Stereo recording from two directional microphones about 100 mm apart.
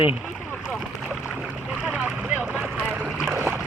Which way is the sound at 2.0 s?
10° right (ahead or behind).